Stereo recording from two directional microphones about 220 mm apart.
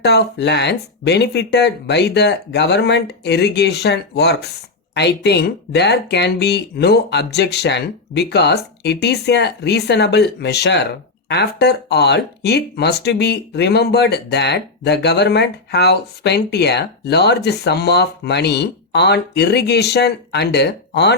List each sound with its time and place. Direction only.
0.0 s speech: 50° left (ahead or behind)